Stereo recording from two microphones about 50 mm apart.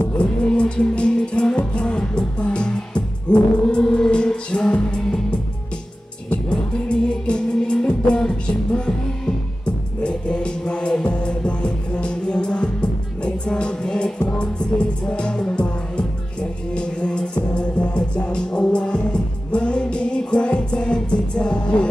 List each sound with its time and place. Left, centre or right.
0.5 s music: centre
6.5 s music: centre